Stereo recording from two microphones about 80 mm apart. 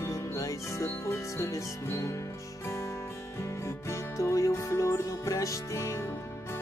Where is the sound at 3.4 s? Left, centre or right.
Left.